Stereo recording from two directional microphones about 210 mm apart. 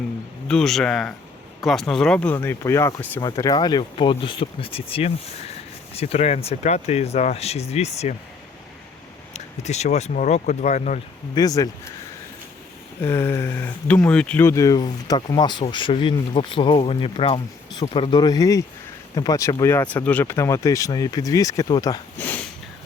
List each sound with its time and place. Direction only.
0.4 s speech: 5° left (ahead or behind); by 8.1 s 30° left (ahead or behind)
9.3 s speech: 30° left (ahead or behind)
11.3 s speech: 15° left (ahead or behind)
13.0 s speech: 15° left (ahead or behind)